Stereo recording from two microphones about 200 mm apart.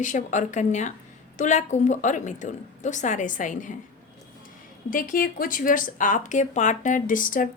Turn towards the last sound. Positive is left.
turn(degrees=45)  # may be behind; listen again after turning